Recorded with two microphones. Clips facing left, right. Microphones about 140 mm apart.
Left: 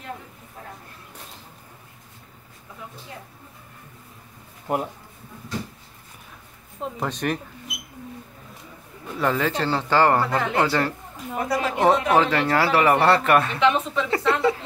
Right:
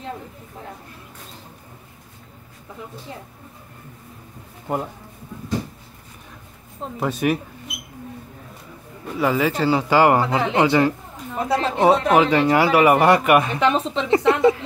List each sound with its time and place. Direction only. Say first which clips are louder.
6.8 s speech: right 4 dB; 5° right (ahead or behind)
9.2 s speech: right 3 dB; 5° right (ahead or behind); by 11.7 s 25° right (ahead or behind)
11.8 s speech: right 3 dB; 15° right (ahead or behind)
13.6 s a woman's voice: right 1 dB; 35° right (ahead or behind)